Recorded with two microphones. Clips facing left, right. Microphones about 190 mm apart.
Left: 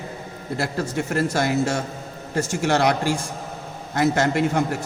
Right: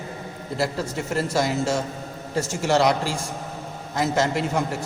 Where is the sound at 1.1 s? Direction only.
55° left (ahead or behind).